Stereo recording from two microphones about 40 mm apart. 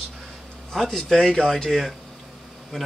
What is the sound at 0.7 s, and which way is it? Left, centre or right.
Speech, centre.